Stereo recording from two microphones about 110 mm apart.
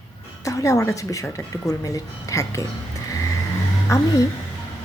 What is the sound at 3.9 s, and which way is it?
Speech, 30° left (ahead or behind).